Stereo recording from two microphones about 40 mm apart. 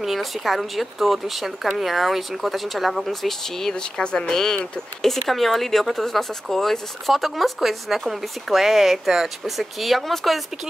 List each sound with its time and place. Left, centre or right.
0.0 s speech: centre
4.0 s speech: left; by 10.4 s centre